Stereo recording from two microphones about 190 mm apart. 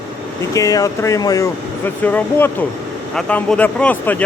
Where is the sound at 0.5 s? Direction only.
15° left (ahead or behind).